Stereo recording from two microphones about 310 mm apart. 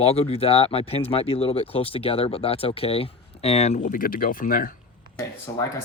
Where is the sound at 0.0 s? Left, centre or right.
Centre.